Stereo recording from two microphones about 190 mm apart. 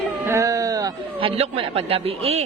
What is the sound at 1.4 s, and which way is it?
Speech, 30° right (ahead or behind).